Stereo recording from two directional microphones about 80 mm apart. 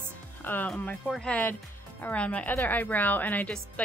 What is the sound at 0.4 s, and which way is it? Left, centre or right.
Music, left.